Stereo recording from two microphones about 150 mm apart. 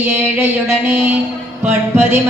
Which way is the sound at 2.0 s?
15° right (ahead or behind).